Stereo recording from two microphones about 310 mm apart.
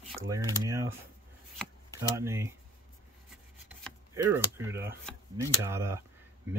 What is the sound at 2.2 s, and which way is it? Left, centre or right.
Speech, centre.